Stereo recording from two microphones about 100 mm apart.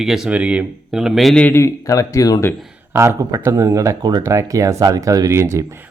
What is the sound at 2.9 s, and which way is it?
Speech, 30° right (ahead or behind).